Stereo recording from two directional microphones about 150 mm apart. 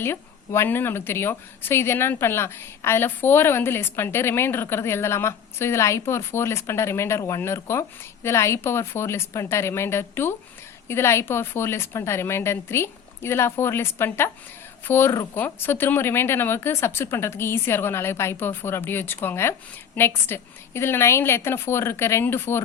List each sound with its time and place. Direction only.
0.0 s speech: 15° left (ahead or behind)